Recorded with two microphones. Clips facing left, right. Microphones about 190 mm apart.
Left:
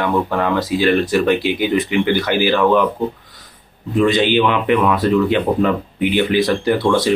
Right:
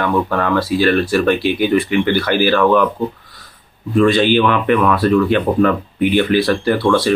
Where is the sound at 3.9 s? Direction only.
20° left (ahead or behind).